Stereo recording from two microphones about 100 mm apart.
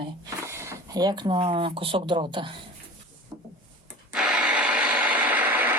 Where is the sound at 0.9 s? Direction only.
40° right (ahead or behind).